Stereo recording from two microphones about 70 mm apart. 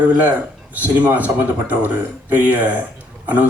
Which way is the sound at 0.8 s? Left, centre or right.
Right.